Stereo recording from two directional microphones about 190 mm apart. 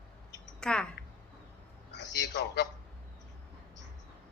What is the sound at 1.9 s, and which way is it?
Telephone, 65° left (ahead or behind).